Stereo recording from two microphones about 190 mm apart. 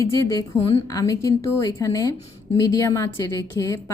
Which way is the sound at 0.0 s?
15° left (ahead or behind).